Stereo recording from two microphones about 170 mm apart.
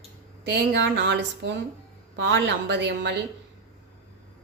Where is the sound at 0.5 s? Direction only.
90° right.